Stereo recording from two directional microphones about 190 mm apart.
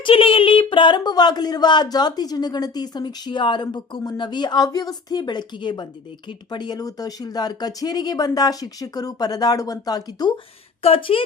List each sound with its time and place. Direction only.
0.0 s speech: 30° left (ahead or behind)